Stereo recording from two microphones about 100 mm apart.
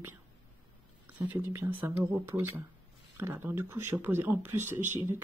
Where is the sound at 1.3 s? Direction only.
20° right (ahead or behind).